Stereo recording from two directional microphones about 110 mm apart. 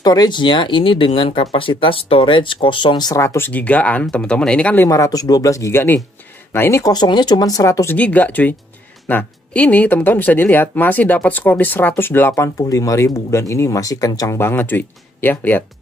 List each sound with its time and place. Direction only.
0.0 s speech: 40° left (ahead or behind)
3.2 s speech: 25° left (ahead or behind)
4.8 s speech: 30° left (ahead or behind)
6.9 s speech: 40° left (ahead or behind)
7.9 s speech: 15° left (ahead or behind)
12.5 s speech: 30° left (ahead or behind)